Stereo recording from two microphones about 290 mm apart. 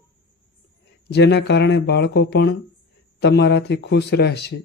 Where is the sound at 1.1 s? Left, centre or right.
Left.